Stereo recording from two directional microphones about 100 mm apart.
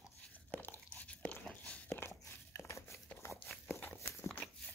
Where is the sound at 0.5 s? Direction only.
15° left (ahead or behind).